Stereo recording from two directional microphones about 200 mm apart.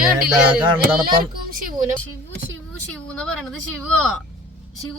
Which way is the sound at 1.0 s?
45° right (ahead or behind).